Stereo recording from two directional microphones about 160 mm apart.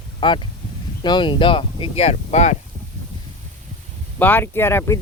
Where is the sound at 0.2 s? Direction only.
30° left (ahead or behind).